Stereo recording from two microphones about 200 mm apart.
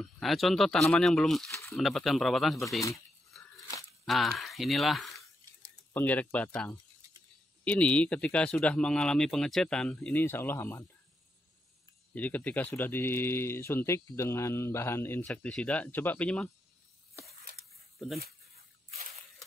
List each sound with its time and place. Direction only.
0.0 s speech: centre (ahead or behind)
1.5 s a sound: 15° left (ahead or behind)
1.8 s speech: centre (ahead or behind)
3.3 s a sound: centre (ahead or behind)
4.0 s speech: centre (ahead or behind)
12.1 s speech: 10° left (ahead or behind)
17.9 s speech: centre (ahead or behind)